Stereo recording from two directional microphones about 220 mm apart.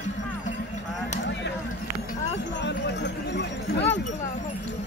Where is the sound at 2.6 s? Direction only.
50° left (ahead or behind).